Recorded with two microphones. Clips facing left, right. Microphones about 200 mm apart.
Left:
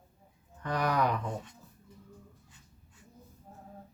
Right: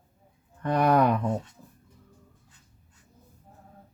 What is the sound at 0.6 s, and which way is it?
Speech, 60° right (ahead or behind).